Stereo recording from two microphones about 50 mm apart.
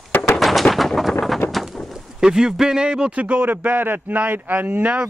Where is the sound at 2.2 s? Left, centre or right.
Centre.